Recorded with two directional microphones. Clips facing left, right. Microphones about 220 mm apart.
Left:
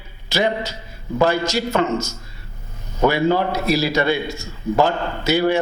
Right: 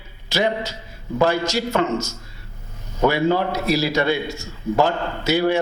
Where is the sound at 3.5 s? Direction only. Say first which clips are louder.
Left 1 dB; 15° left (ahead or behind).